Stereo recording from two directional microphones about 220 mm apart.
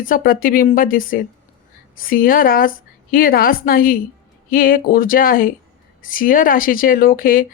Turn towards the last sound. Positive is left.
turn(degrees=40)  # may be behind; listen again after turning